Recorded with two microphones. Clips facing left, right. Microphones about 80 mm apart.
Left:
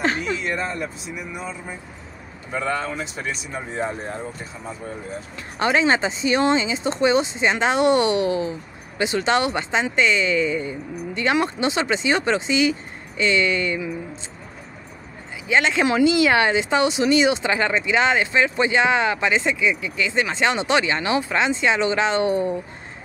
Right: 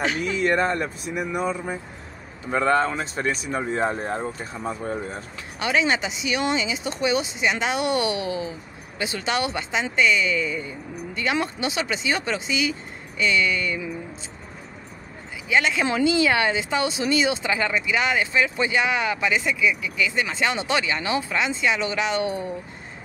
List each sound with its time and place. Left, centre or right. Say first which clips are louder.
0.1 s a sound: left 1 dB; left
0.4 s speech: right 5 dB; right
5.6 s speech: left 4 dB; left
15.5 s speech: left 3 dB; left